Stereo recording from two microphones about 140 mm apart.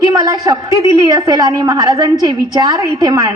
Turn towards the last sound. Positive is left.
turn(degrees=-30)  # may be behind; listen again after turning